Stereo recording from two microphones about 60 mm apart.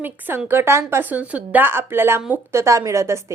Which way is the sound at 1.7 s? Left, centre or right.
Right.